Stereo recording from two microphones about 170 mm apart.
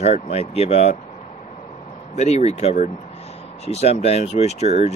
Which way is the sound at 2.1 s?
40° left (ahead or behind).